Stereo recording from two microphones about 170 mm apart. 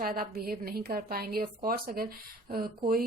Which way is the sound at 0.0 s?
60° right (ahead or behind).